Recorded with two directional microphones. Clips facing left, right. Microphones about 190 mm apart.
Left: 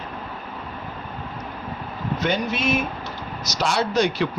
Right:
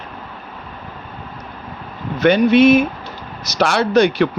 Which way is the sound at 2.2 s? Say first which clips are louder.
Right 14 dB; 65° right (ahead or behind).